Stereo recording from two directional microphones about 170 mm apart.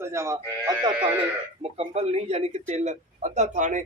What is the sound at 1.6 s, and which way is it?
Speech, 40° right (ahead or behind).